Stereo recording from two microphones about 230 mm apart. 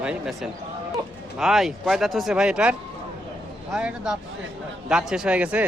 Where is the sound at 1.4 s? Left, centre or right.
Centre.